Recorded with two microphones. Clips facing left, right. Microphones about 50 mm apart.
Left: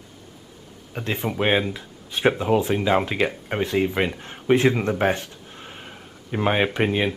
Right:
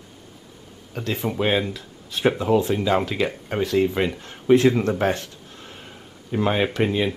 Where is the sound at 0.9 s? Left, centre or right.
Left.